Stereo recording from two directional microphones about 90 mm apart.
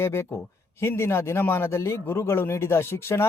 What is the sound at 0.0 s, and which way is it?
Speech, 30° left (ahead or behind).